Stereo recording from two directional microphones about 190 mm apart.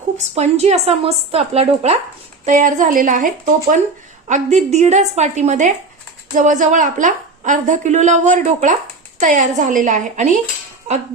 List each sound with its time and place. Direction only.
0.3 s a woman's voice: 35° right (ahead or behind)